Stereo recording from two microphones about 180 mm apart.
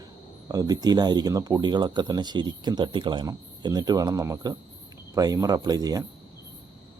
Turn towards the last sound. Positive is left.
turn(degrees=-20)  # may be behind; listen again after turning